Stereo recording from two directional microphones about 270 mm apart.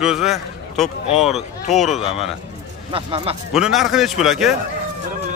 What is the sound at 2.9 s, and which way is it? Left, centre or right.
Speech, centre.